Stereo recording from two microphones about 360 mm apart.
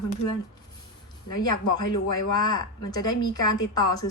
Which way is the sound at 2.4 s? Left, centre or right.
Centre.